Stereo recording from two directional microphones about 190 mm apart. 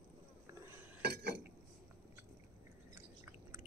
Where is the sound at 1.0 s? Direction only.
60° right (ahead or behind).